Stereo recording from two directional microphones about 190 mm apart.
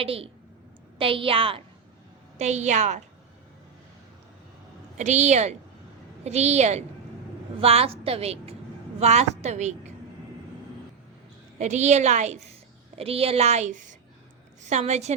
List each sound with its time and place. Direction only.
0.0 s a woman's voice: 30° right (ahead or behind)
4.9 s a woman's voice: 40° right (ahead or behind)
11.6 s a woman's voice: 35° right (ahead or behind)